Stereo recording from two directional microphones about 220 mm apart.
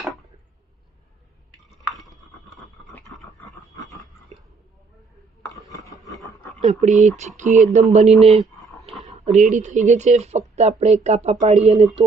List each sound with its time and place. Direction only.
5.4 s dishes: 15° left (ahead or behind)
6.6 s speech: 35° right (ahead or behind)